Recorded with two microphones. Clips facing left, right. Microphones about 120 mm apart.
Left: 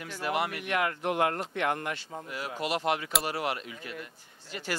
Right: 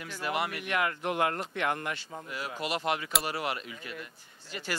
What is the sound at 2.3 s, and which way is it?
Speech, 45° left (ahead or behind).